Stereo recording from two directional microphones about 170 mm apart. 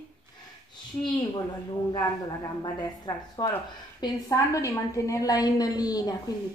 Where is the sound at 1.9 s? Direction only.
25° left (ahead or behind).